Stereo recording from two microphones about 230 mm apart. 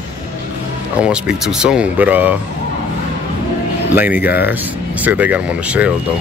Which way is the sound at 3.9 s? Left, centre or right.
Centre.